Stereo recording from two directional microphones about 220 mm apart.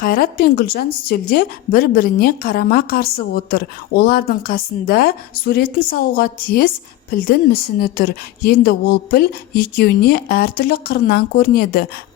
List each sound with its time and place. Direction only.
0.0 s speech: 40° left (ahead or behind)